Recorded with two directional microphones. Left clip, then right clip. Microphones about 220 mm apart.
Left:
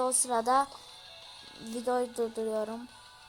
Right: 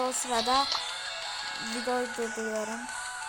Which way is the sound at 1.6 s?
30° right (ahead or behind).